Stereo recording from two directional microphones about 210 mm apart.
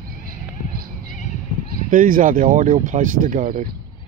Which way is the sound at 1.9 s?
40° right (ahead or behind).